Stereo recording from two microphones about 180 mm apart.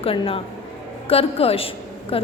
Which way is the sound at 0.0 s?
30° left (ahead or behind).